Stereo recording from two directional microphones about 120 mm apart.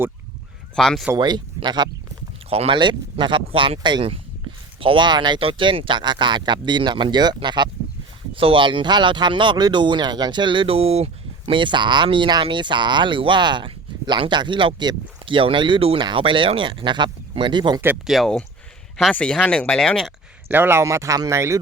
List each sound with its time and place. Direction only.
0.8 s speech: 5° left (ahead or behind)
1.1 s speech: 35° right (ahead or behind)
2.5 s speech: 55° right (ahead or behind)
2.7 s speech: 40° right (ahead or behind)
18.0 s speech: centre (ahead or behind)
20.5 s speech: 20° right (ahead or behind)